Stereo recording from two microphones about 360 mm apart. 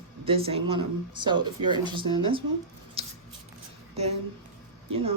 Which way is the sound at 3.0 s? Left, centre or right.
Centre.